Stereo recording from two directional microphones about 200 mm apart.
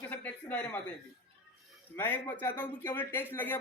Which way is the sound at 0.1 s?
10° left (ahead or behind).